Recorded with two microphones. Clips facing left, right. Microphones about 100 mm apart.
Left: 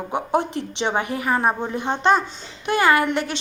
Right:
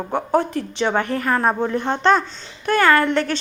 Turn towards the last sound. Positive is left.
turn(degrees=15)  # may be behind; listen again after turning